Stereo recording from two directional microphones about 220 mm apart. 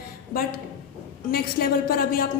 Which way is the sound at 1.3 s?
45° left (ahead or behind).